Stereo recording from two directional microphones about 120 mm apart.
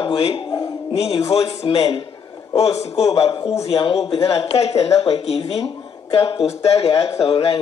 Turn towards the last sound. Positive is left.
turn(degrees=50)  # may be behind; listen again after turning